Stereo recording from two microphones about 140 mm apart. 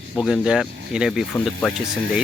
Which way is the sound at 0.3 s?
Centre (ahead or behind).